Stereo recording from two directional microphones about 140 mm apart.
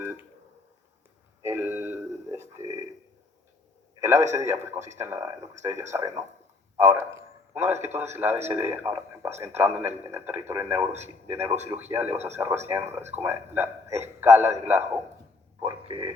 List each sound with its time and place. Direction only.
0.0 s telephone dialing: 15° right (ahead or behind)
1.4 s a sound: 20° right (ahead or behind)
4.0 s a man's voice: 20° right (ahead or behind)
15.6 s speech: 35° right (ahead or behind)